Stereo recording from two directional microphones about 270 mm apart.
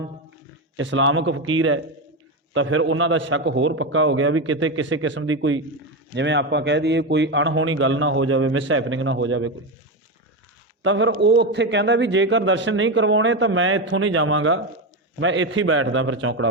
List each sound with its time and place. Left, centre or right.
0.8 s a man's voice: right
10.8 s a man's voice: right